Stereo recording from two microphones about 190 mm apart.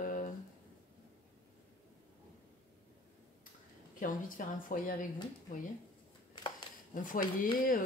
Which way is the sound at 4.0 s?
45° left (ahead or behind).